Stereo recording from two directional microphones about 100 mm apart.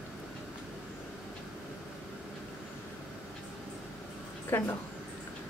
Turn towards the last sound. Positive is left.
turn(degrees=25)  # may be behind; listen again after turning